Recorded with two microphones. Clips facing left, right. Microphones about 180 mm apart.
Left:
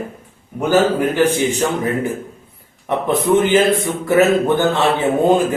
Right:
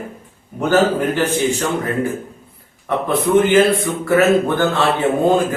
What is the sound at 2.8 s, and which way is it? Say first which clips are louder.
Speech: left 1 dB; 20° left (ahead or behind).